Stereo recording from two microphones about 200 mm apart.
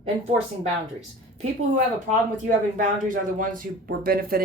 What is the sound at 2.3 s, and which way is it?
Speech, 40° right (ahead or behind).